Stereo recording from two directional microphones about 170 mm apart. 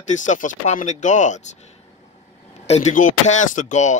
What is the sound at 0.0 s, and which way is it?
Speech, 45° left (ahead or behind).